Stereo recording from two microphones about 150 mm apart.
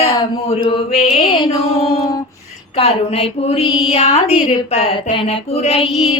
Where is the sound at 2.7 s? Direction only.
40° left (ahead or behind).